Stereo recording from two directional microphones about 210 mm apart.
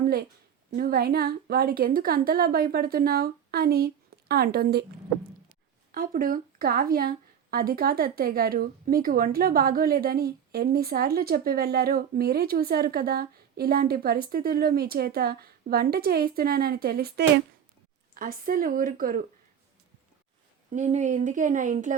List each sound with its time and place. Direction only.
0.0 s a sound: 45° right (ahead or behind)
0.7 s speech: 45° right (ahead or behind)
5.9 s a woman's voice: 45° right (ahead or behind)
20.7 s a woman's voice: 35° right (ahead or behind)